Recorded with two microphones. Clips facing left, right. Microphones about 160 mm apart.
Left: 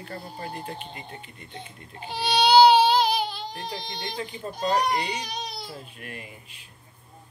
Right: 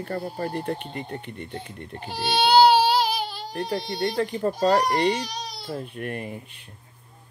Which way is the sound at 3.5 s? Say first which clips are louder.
Right 7 dB; 45° right (ahead or behind).